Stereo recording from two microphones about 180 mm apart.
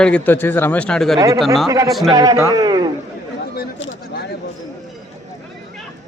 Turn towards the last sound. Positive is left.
turn(degrees=80)